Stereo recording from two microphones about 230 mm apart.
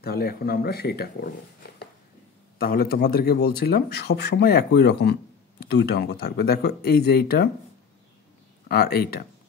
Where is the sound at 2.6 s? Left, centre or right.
Left.